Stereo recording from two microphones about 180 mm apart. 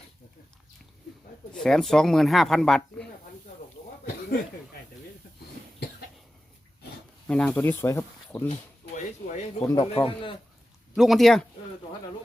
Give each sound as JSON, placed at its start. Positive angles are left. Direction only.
{"t": 1.5, "sound": "speech", "side_deg": 5}
{"t": 7.3, "sound": "speech", "side_deg": 5}
{"t": 9.6, "sound": "speech", "side_deg": 20}
{"t": 10.9, "sound": "speech", "side_deg": 0}